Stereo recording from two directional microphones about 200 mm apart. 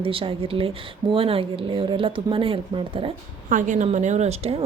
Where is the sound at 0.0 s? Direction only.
25° right (ahead or behind).